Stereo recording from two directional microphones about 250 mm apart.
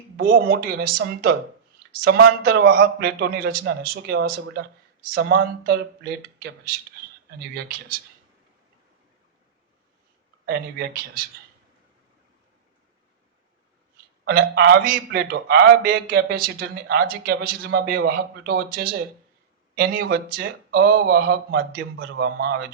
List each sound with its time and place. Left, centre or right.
0.2 s a man's voice: right
10.4 s a man's voice: right
14.3 s a man's voice: right